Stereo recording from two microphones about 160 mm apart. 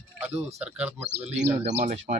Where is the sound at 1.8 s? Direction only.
50° right (ahead or behind).